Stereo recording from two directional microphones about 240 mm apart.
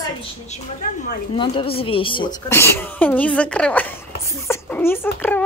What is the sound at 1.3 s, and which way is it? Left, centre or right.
Speech, left.